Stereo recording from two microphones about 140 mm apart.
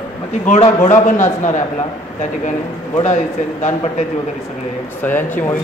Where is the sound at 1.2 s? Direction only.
60° left (ahead or behind).